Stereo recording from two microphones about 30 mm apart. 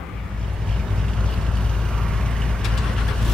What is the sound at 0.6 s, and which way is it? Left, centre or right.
Vehicle, centre.